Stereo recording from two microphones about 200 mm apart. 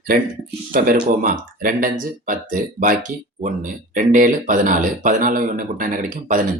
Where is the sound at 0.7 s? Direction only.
45° right (ahead or behind).